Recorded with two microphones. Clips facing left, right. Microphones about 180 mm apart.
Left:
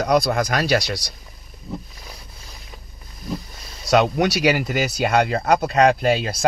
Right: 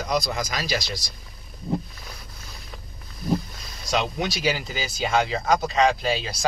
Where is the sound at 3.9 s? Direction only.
65° left (ahead or behind).